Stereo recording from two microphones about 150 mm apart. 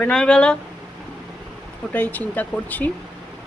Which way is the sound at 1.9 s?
10° left (ahead or behind).